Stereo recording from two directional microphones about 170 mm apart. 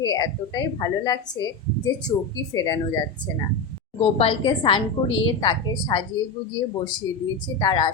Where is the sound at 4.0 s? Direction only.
35° left (ahead or behind).